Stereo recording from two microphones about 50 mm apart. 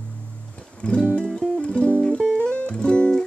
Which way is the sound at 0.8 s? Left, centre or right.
Left.